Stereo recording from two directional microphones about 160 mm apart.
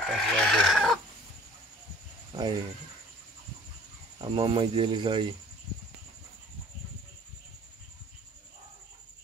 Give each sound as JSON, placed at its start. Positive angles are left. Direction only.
{"t": 0.0, "sound": "chicken", "side_deg": 0}
{"t": 2.3, "sound": "speech", "side_deg": -25}
{"t": 4.2, "sound": "speech", "side_deg": -30}